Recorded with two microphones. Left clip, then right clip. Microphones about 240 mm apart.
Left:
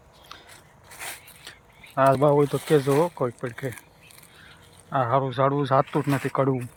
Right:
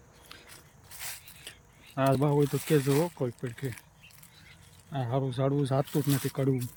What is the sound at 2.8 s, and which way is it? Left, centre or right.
Speech, left.